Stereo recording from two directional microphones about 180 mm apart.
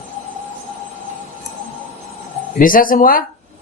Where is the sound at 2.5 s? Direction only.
50° left (ahead or behind).